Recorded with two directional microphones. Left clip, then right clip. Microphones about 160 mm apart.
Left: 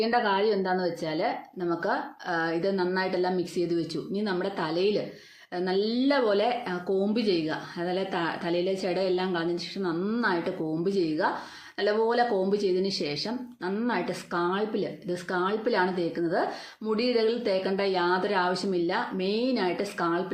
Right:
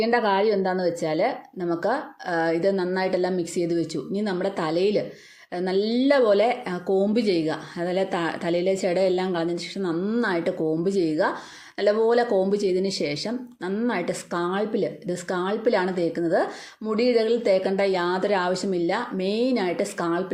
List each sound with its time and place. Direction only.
0.0 s speech: 35° right (ahead or behind)